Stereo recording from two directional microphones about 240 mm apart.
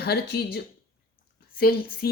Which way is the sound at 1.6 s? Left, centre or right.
Left.